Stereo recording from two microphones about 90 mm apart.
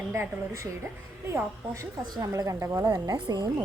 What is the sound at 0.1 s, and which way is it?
A woman's voice, 30° right (ahead or behind).